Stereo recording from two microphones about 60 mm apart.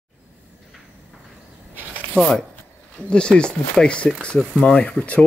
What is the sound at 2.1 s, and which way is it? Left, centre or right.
Speech, centre.